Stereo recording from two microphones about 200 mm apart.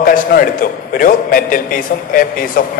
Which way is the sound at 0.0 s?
45° left (ahead or behind).